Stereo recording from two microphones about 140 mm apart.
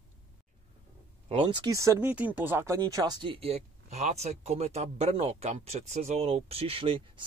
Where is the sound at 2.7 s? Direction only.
25° right (ahead or behind).